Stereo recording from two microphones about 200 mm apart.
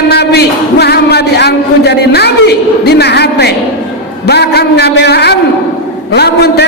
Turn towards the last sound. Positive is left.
turn(degrees=55)  # may be behind; listen again after turning